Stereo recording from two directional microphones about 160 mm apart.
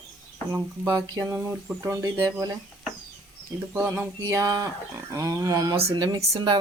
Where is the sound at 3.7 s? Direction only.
10° right (ahead or behind).